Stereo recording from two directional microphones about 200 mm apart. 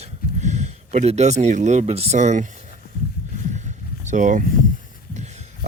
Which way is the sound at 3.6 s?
35° right (ahead or behind).